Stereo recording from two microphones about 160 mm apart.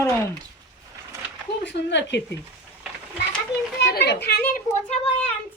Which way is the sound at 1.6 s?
90° left.